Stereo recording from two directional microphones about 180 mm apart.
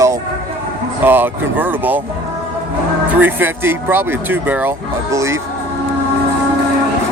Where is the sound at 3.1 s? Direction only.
10° right (ahead or behind).